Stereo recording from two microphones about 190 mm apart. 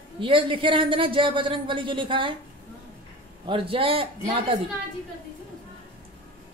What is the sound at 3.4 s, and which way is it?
Speech, 25° right (ahead or behind).